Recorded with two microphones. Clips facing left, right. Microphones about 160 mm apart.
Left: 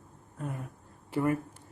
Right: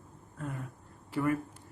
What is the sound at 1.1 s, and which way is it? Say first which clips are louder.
Speech: left 2 dB; 25° left (ahead or behind).